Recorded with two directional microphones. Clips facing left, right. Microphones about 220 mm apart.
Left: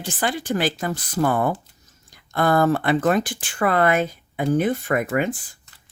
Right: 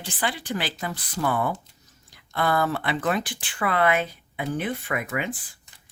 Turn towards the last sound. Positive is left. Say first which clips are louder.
# left 7 dB
turn(degrees=45)  # may be behind; listen again after turning